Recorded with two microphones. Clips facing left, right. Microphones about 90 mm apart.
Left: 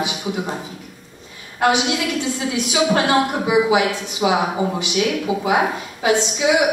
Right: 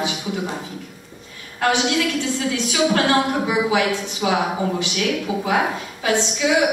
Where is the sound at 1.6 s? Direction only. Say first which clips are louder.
Left 1 dB; 15° left (ahead or behind).